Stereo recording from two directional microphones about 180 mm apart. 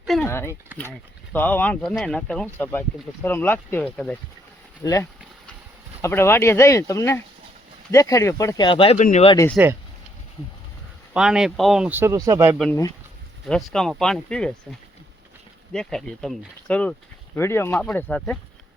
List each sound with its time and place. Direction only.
0.0 s a sound: centre (ahead or behind)
0.3 s speech: 15° left (ahead or behind)
4.8 s speech: 20° left (ahead or behind)
9.0 s speech: 40° left (ahead or behind)
9.6 s speech: 10° right (ahead or behind)
11.1 s speech: 5° right (ahead or behind)
13.5 s speech: centre (ahead or behind)